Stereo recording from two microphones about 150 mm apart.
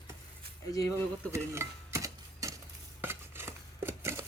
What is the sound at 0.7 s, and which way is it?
Speech, 25° left (ahead or behind).